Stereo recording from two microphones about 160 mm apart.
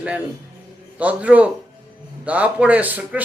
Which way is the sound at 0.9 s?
10° right (ahead or behind).